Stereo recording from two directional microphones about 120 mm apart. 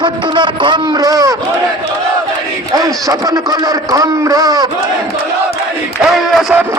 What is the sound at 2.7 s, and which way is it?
A man's voice, 30° right (ahead or behind).